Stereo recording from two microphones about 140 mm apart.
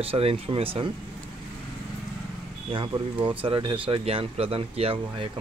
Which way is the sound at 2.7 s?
40° right (ahead or behind).